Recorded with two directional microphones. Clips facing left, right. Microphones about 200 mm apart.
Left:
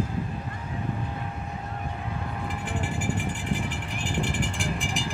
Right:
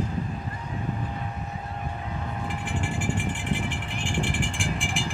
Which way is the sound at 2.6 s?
40° left (ahead or behind).